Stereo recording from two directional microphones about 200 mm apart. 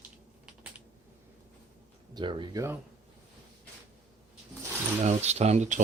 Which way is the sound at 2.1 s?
20° right (ahead or behind).